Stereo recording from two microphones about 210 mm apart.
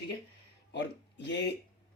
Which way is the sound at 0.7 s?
55° left (ahead or behind).